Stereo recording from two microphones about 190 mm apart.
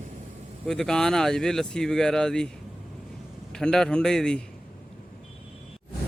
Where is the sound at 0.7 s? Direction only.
5° left (ahead or behind).